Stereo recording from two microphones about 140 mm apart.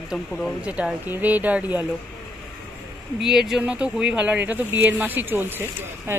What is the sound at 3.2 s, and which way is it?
Speech, 5° right (ahead or behind).